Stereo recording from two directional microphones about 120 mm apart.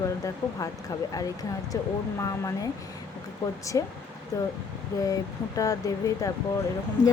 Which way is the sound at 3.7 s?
30° left (ahead or behind).